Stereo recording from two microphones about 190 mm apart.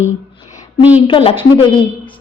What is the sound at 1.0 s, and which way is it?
Speech, 30° left (ahead or behind).